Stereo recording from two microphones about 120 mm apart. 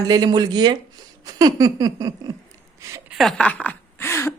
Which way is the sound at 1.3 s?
30° right (ahead or behind).